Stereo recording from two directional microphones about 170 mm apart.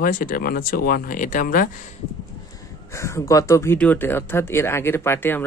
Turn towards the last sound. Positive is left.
turn(degrees=10)  # may be behind; listen again after turning